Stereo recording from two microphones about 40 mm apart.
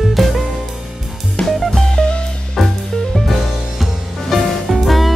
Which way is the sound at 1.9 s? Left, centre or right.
Left.